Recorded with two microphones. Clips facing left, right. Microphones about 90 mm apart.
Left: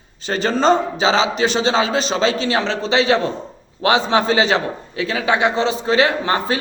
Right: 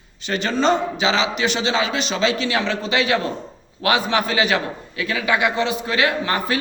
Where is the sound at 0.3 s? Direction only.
35° left (ahead or behind).